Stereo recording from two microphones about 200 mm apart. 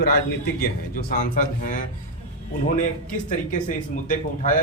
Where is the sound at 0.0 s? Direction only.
50° left (ahead or behind).